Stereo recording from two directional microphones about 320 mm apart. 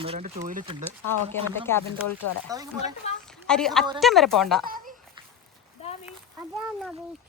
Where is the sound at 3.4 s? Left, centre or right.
Centre.